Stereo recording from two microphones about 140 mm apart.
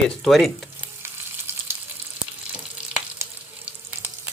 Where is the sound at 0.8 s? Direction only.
15° right (ahead or behind).